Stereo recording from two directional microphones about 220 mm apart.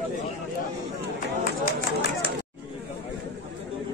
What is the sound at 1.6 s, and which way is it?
Speech, 45° left (ahead or behind).